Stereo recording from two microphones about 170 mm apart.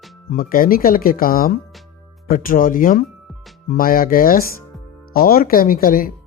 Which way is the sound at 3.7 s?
55° left (ahead or behind).